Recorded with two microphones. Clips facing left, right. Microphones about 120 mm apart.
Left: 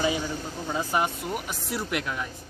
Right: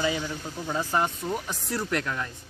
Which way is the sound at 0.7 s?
10° left (ahead or behind).